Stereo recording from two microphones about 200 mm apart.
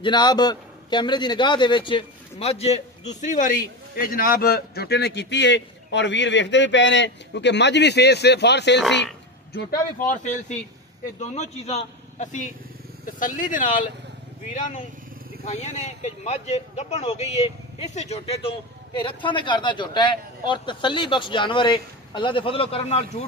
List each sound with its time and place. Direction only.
0.0 s a man's voice: 20° left (ahead or behind); by 8.8 s 60° left (ahead or behind)
9.7 s speech: 40° left (ahead or behind)
15.4 s a man's voice: 35° left (ahead or behind)